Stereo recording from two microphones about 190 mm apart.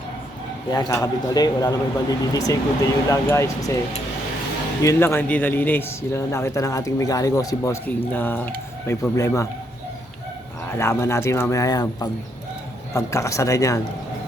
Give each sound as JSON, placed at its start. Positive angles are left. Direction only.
{"t": 0.7, "sound": "speech", "side_deg": 20}
{"t": 4.8, "sound": "speech", "side_deg": 15}
{"t": 10.8, "sound": "speech", "side_deg": 15}